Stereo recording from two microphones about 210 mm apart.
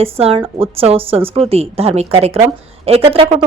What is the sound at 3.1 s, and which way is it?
Speech, 25° right (ahead or behind).